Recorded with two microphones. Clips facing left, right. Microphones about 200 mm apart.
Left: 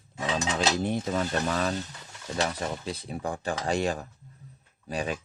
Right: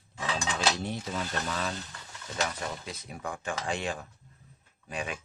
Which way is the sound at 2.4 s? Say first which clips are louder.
Left 4 dB; 30° left (ahead or behind).